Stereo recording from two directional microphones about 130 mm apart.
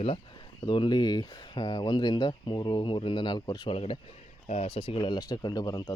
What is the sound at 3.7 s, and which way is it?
Speech, 45° left (ahead or behind).